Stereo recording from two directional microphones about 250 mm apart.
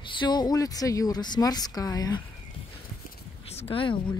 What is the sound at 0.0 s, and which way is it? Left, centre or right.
Speech, centre.